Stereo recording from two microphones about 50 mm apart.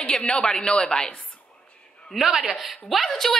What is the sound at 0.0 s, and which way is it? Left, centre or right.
Speech, left.